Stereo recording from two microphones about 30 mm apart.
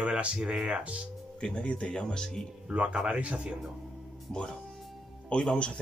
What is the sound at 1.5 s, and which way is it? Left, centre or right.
Speech, left.